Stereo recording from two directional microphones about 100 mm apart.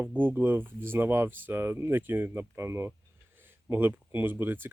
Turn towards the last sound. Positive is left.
turn(degrees=-20)  # may be behind; listen again after turning